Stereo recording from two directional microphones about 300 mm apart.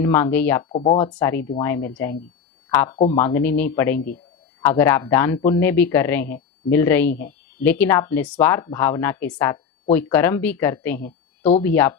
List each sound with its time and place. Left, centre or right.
0.0 s speech: centre
0.7 s speech: centre
0.9 s speech: centre